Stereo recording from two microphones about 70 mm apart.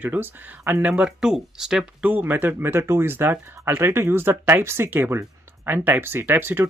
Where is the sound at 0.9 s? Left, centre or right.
Centre.